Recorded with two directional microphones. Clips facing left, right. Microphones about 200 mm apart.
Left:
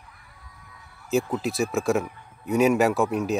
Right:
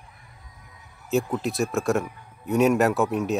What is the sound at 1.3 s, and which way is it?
A man's voice, centre (ahead or behind).